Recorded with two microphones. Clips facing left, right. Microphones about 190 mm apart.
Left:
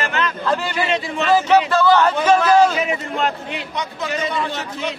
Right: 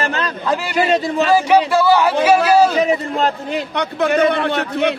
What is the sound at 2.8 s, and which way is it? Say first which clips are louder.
Speech: right 5 dB; 35° right (ahead or behind).